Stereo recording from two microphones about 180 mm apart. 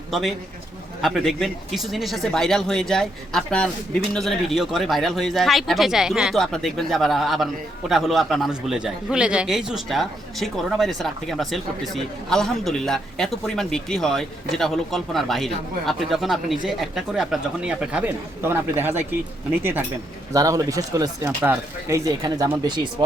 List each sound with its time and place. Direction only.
0.1 s speech: centre (ahead or behind)
20.3 s speech: 20° right (ahead or behind)